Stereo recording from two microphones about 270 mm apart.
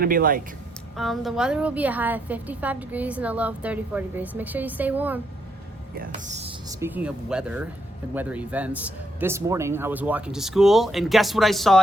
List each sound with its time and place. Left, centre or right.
0.0 s speech: right
0.9 s a woman's voice: centre
5.9 s speech: right
6.7 s a woman's voice: centre